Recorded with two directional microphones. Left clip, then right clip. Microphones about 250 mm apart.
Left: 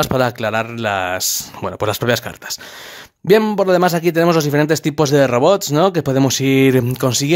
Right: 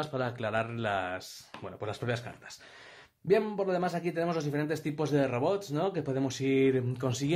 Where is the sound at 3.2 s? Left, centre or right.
Left.